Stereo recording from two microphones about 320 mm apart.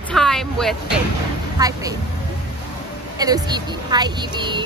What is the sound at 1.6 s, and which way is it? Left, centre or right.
Speech, centre.